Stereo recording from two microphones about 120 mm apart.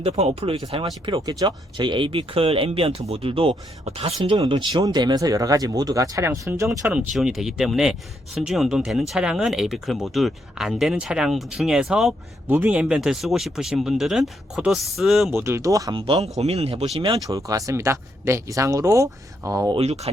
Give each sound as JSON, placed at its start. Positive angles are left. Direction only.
{"t": 0.0, "sound": "speech", "side_deg": -55}
{"t": 0.9, "sound": "speech", "side_deg": -40}
{"t": 4.4, "sound": "speech", "side_deg": -35}
{"t": 6.9, "sound": "speech", "side_deg": -5}
{"t": 12.5, "sound": "speech", "side_deg": -15}
{"t": 15.3, "sound": "speech", "side_deg": -20}
{"t": 16.0, "sound": "speech", "side_deg": -55}
{"t": 17.2, "sound": "speech", "side_deg": -30}
{"t": 19.7, "sound": "speech", "side_deg": -60}